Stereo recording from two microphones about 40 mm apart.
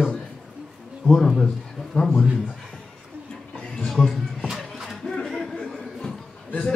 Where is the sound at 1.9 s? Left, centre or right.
Left.